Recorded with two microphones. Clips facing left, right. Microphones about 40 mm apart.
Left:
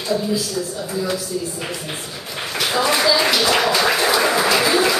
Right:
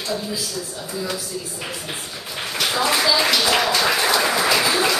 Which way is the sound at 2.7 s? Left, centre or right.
Centre.